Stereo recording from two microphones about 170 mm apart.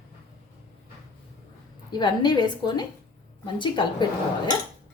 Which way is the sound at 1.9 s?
25° left (ahead or behind).